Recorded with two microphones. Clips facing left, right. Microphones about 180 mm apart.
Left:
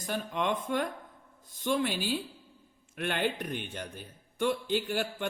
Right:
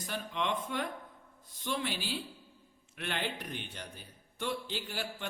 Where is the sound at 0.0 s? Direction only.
50° left (ahead or behind).